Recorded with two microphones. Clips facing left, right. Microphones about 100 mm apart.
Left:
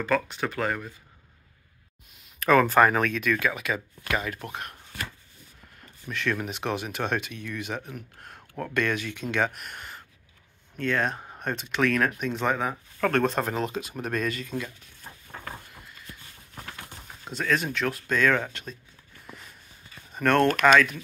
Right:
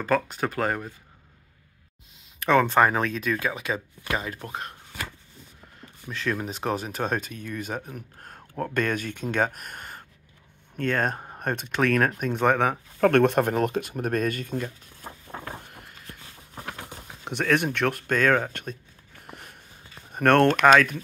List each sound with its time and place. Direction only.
0.0 s speech: 40° right (ahead or behind)
2.4 s speech: 25° right (ahead or behind)
6.4 s speech: 35° right (ahead or behind)
13.0 s speech: 60° right (ahead or behind)
15.6 s a sound: 55° right (ahead or behind)
17.2 s speech: 65° right (ahead or behind)
20.6 s speech: 40° right (ahead or behind)